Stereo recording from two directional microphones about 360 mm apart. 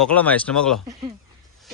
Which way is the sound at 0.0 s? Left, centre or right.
Centre.